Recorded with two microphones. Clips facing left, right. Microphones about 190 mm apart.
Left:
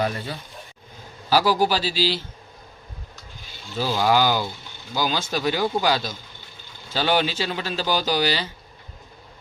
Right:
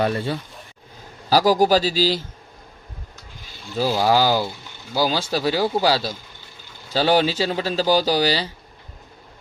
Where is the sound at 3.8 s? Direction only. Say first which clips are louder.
Right 2 dB; 35° right (ahead or behind).